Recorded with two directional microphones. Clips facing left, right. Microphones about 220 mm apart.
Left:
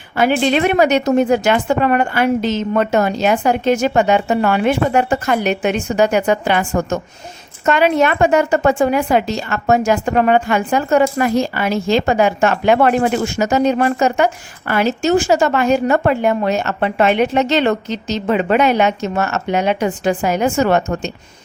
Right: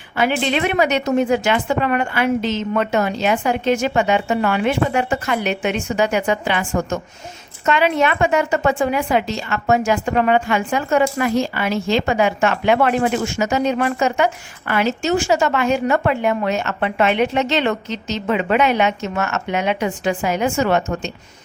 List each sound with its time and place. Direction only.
0.2 s a woman's voice: 45° left (ahead or behind)